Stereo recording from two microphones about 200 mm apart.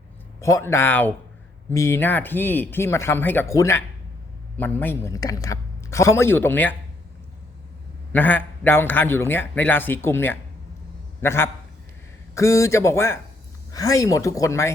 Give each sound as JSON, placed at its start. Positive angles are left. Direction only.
{"t": 0.3, "sound": "a man's voice", "side_deg": 15}
{"t": 8.1, "sound": "a man's voice", "side_deg": 10}